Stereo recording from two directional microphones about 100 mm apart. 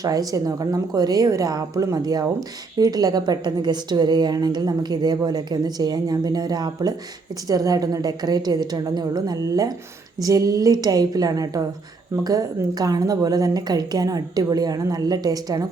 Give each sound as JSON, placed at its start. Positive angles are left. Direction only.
{"t": 0.0, "sound": "a woman's voice", "side_deg": -40}